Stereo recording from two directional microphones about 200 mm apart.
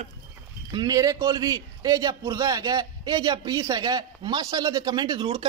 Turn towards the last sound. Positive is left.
turn(degrees=-20)  # may be behind; listen again after turning